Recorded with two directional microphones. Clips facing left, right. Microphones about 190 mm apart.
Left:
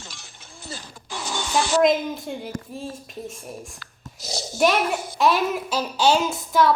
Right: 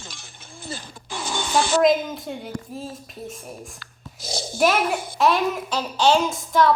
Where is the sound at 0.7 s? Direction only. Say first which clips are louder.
Right 2 dB; 55° right (ahead or behind).